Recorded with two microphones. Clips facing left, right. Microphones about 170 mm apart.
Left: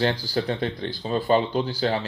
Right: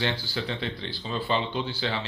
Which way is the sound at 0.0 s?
40° left (ahead or behind).